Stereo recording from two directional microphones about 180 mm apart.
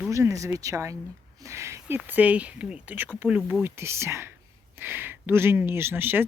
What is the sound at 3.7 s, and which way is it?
Speech, 15° right (ahead or behind).